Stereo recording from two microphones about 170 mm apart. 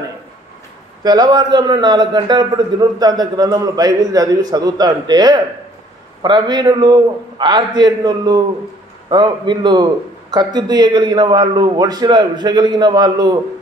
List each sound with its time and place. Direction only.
1.0 s a man's voice: 25° right (ahead or behind)